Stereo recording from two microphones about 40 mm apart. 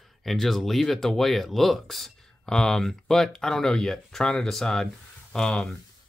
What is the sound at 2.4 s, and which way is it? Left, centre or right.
Speech, centre.